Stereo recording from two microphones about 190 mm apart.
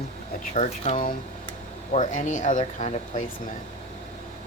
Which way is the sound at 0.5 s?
40° left (ahead or behind).